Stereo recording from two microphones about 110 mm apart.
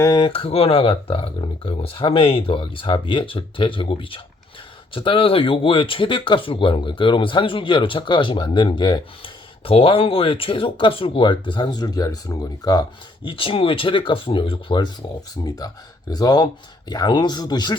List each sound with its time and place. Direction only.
0.2 s speech: 55° left (ahead or behind)
9.6 s speech: 55° left (ahead or behind); by 12.8 s 35° left (ahead or behind)
13.2 s speech: 55° left (ahead or behind)